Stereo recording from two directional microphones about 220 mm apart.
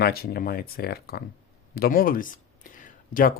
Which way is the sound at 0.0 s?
45° left (ahead or behind).